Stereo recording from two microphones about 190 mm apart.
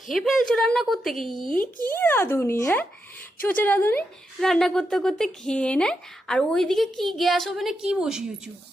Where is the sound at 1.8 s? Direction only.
10° left (ahead or behind).